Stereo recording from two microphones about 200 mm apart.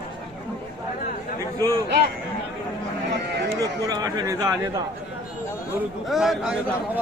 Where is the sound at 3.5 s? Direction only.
20° right (ahead or behind).